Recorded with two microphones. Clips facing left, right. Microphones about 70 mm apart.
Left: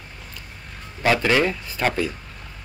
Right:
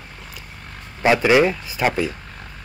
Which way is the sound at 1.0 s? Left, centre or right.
Centre.